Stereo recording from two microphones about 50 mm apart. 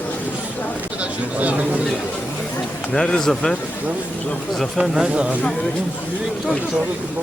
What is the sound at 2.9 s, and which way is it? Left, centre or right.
Speech, centre.